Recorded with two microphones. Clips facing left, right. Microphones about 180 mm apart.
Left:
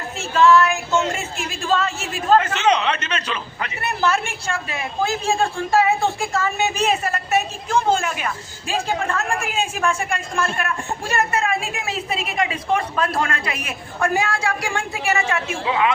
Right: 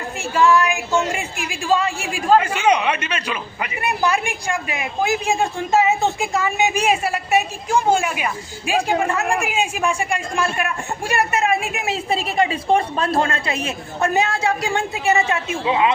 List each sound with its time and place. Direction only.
0.2 s a woman's voice: 15° right (ahead or behind)